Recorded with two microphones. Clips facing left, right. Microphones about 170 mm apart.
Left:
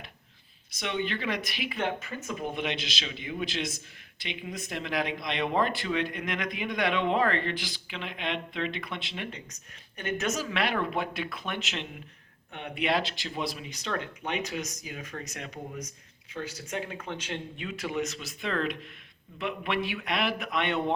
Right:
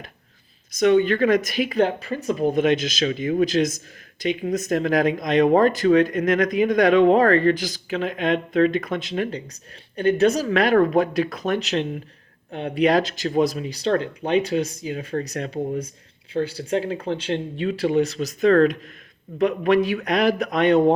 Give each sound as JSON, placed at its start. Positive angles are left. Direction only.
{"t": 0.7, "sound": "speech", "side_deg": -45}